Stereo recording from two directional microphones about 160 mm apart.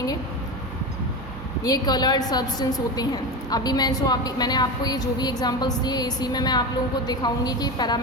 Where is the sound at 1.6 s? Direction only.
25° left (ahead or behind).